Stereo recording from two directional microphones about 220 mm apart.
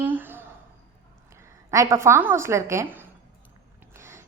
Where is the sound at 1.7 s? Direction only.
15° right (ahead or behind).